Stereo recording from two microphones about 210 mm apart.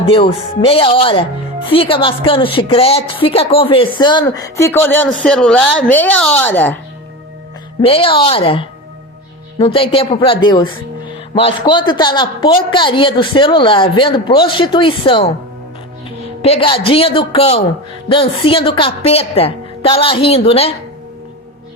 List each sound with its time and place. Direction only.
0.1 s a woman's voice: 25° left (ahead or behind); by 6.7 s 10° left (ahead or behind)
7.8 s a woman's voice: 25° left (ahead or behind)
16.0 s music: 25° left (ahead or behind)
16.8 s a woman's voice: 25° left (ahead or behind)